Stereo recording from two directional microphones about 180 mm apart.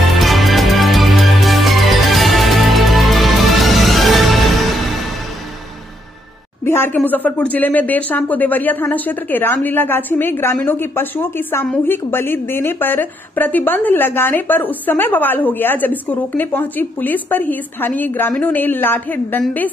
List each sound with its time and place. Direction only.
0.2 s music: centre (ahead or behind)
6.6 s speech: 10° left (ahead or behind)